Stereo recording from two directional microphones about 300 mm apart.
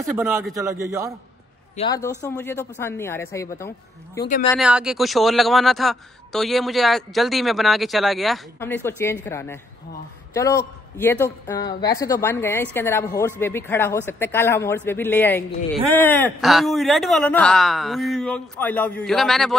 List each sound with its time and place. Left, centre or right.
0.0 s a man's voice: centre
1.8 s speech: centre
4.2 s speech: left
4.5 s speech: centre